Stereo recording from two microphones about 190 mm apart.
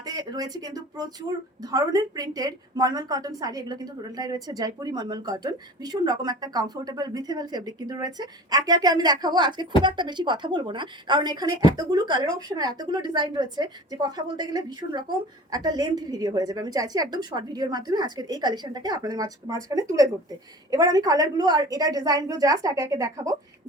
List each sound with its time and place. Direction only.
0.0 s a woman's voice: 20° right (ahead or behind)